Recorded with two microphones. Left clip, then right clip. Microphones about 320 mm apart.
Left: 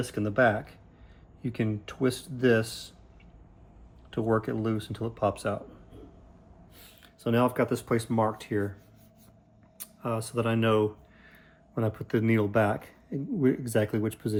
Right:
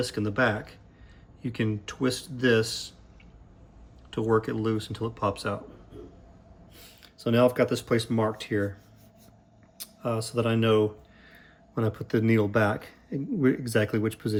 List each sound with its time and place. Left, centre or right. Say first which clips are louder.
0.0 s speech: left 1 dB; centre
4.1 s speech: right 2 dB; centre
6.7 s speech: right 4 dB; centre
9.7 s speech: right 2 dB; centre